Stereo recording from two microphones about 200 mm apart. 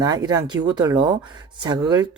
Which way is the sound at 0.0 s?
20° right (ahead or behind).